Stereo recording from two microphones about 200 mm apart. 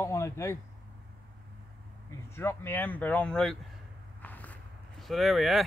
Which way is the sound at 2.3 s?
10° left (ahead or behind).